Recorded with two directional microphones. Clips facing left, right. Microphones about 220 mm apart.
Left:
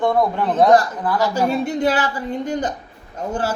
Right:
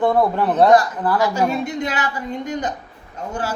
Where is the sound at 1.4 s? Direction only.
35° left (ahead or behind).